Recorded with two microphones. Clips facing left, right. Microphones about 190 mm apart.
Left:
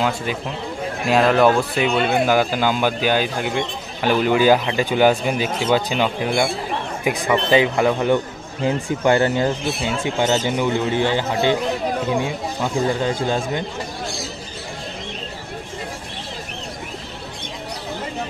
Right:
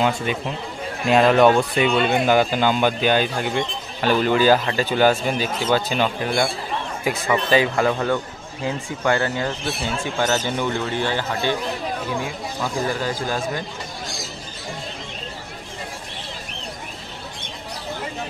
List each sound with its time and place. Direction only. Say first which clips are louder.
0.0 s a man's voice: right 1 dB; centre (ahead or behind); by 13.7 s 20° left (ahead or behind)